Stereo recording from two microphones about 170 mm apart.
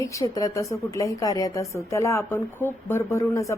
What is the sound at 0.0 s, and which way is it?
A woman's voice, 20° left (ahead or behind).